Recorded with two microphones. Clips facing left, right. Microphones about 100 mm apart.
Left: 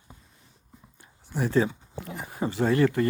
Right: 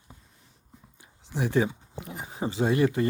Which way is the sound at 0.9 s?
20° right (ahead or behind).